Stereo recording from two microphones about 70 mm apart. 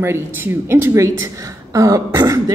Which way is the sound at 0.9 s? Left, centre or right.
Right.